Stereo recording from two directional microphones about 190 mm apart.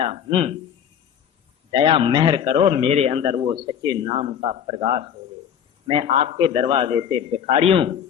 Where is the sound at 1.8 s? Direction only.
25° right (ahead or behind).